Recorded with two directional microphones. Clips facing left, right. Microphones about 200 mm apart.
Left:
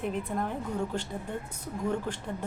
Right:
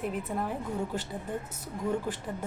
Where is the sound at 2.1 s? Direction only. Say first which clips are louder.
Right 1 dB; 5° right (ahead or behind).